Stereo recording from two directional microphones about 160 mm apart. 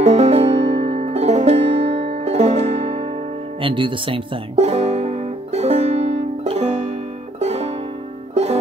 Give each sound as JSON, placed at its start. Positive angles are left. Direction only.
{"t": 0.0, "sound": "music", "side_deg": -45}
{"t": 3.6, "sound": "music", "side_deg": -30}